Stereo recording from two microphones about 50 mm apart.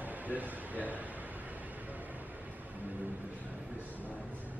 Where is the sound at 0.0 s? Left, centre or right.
Right.